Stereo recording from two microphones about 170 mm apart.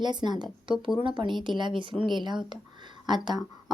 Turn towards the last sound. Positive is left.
turn(degrees=-25)  # may be behind; listen again after turning